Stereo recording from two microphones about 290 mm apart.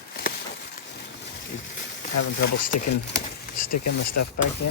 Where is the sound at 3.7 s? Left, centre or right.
Left.